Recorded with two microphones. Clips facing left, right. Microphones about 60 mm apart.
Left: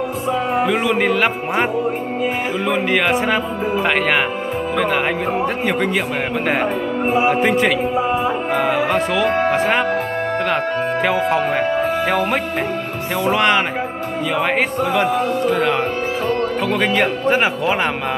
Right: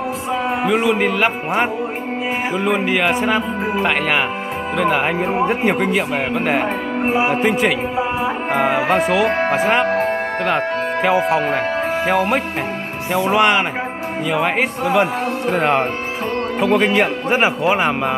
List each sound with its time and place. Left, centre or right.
0.7 s speech: centre
4.7 s speech: centre
5.2 s speech: centre
8.5 s speech: centre
15.4 s speech: right
16.6 s speech: centre